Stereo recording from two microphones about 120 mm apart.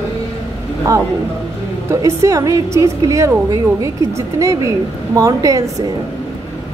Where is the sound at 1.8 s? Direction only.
25° right (ahead or behind).